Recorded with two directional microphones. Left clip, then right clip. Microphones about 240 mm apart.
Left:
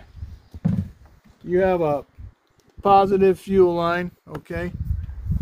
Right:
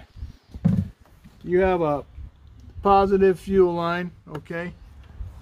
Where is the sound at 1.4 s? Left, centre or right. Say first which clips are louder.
Left 1 dB; left.